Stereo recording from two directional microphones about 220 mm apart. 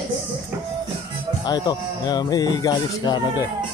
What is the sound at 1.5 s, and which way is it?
Speech, 20° left (ahead or behind).